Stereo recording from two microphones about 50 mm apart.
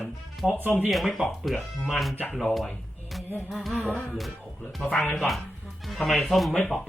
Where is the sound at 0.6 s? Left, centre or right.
Right.